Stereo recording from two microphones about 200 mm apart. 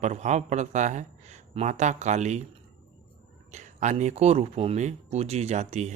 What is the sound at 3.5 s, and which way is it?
Speech, 35° right (ahead or behind).